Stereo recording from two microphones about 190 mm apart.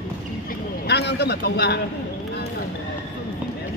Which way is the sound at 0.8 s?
60° left (ahead or behind).